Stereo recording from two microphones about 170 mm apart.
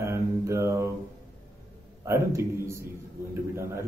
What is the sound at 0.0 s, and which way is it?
Mantra, 15° right (ahead or behind).